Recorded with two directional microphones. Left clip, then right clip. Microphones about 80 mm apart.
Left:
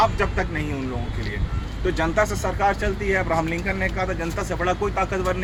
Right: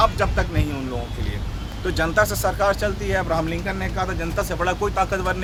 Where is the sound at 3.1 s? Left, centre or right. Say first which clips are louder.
Even; right.